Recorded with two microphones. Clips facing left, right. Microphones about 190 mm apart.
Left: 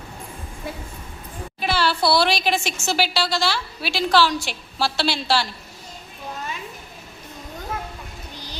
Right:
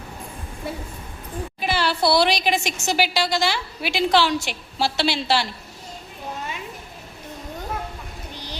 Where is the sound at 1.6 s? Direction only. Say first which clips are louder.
Even; 15° right (ahead or behind).